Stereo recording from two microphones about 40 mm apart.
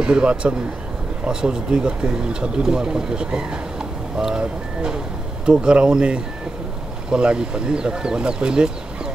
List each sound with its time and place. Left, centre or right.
0.0 s speech: right